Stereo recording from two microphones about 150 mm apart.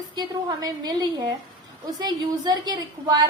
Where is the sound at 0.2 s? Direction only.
25° right (ahead or behind).